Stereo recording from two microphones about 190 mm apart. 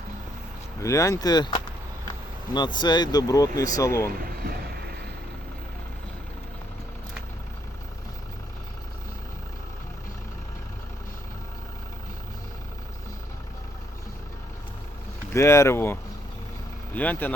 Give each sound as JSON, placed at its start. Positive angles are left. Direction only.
{"t": 0.8, "sound": "speech", "side_deg": 15}
{"t": 15.3, "sound": "speech", "side_deg": 15}